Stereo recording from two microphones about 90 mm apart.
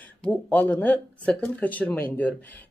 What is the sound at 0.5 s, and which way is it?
A woman's voice, 20° left (ahead or behind).